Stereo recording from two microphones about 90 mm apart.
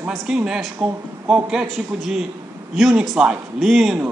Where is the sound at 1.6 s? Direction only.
Centre (ahead or behind).